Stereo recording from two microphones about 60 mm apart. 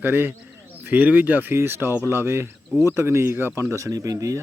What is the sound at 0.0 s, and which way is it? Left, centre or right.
Speech, right.